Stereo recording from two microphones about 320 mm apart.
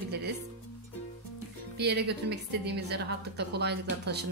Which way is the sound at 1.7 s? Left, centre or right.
Right.